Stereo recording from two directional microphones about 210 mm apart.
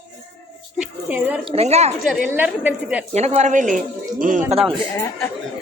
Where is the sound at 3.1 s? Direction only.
30° right (ahead or behind).